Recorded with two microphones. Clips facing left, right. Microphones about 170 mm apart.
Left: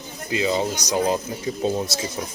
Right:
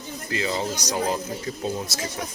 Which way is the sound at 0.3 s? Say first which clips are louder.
Left 4 dB; 20° left (ahead or behind).